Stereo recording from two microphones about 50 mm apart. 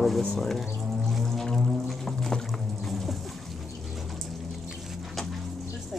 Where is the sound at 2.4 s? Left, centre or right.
Centre.